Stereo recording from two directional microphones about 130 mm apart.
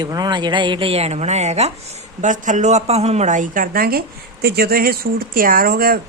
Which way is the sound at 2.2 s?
75° right (ahead or behind).